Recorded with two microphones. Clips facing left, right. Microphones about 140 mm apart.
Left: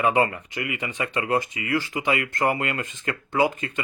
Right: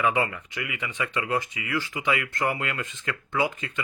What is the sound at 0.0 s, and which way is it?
Speech, 40° left (ahead or behind).